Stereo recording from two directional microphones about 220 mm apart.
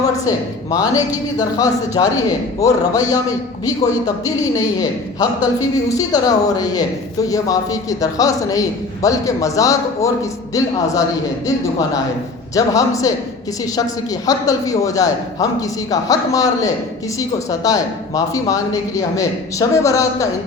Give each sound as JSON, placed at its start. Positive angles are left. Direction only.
{"t": 0.0, "sound": "a woman's voice", "side_deg": 15}
{"t": 4.5, "sound": "a woman's voice", "side_deg": 15}
{"t": 12.5, "sound": "a woman's voice", "side_deg": 15}
{"t": 14.3, "sound": "a woman's voice", "side_deg": 15}